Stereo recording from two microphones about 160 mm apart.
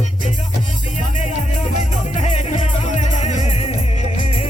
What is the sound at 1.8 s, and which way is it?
Music, 45° left (ahead or behind).